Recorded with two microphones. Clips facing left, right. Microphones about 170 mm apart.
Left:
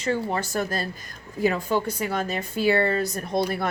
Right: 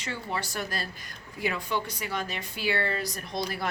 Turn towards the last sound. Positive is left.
turn(degrees=50)  # may be behind; listen again after turning